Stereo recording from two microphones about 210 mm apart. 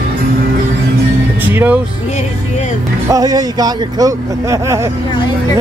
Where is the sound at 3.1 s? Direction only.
15° right (ahead or behind).